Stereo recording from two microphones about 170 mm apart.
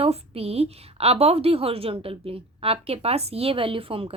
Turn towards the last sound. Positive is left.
turn(degrees=-30)  # may be behind; listen again after turning